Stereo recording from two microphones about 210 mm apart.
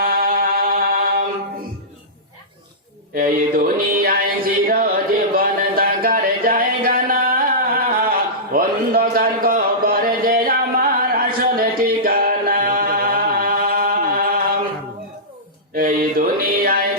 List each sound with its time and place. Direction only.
0.0 s music: 45° right (ahead or behind)
3.2 s a sound: 45° right (ahead or behind)
15.7 s mantra: 45° right (ahead or behind)